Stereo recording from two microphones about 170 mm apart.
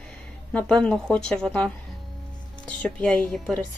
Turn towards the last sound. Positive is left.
turn(degrees=5)  # may be behind; listen again after turning